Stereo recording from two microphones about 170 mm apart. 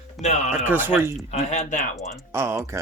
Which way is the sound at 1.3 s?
45° left (ahead or behind).